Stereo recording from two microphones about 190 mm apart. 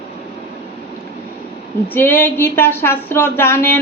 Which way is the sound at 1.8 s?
10° left (ahead or behind).